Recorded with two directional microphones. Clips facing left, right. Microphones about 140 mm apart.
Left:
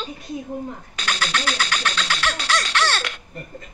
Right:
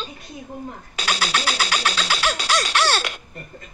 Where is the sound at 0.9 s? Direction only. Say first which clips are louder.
Right 2 dB; 10° right (ahead or behind).